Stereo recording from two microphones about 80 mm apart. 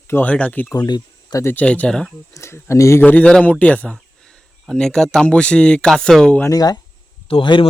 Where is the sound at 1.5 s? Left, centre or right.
Centre.